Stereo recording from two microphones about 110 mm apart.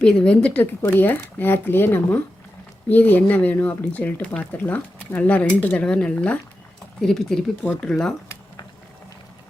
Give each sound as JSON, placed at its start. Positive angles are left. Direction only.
{"t": 0.0, "sound": "speech", "side_deg": 10}